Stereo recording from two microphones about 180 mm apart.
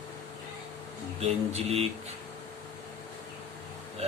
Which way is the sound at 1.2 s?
35° right (ahead or behind).